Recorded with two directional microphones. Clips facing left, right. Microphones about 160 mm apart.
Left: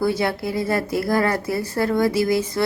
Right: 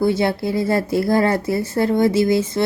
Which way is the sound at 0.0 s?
25° right (ahead or behind).